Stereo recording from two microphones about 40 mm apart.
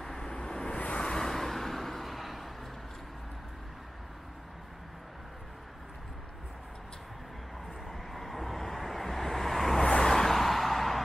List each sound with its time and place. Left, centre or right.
0.0 s vehicle: centre
0.7 s vehicle: left
1.0 s vehicle: centre
7.8 s vehicle: centre
9.8 s vehicle: left
10.1 s a sound: centre